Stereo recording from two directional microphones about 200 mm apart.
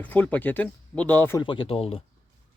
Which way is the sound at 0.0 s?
10° left (ahead or behind).